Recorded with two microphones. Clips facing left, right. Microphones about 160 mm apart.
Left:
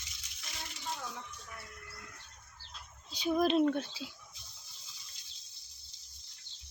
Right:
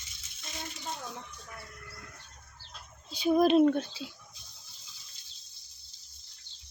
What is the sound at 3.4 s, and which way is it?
Speech, 10° right (ahead or behind).